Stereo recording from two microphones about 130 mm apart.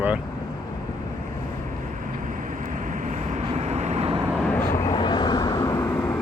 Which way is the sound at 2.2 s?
90° right.